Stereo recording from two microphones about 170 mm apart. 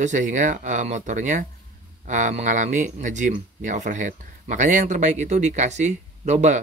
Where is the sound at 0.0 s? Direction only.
45° right (ahead or behind).